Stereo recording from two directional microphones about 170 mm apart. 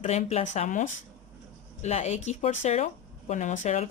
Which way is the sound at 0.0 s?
40° left (ahead or behind).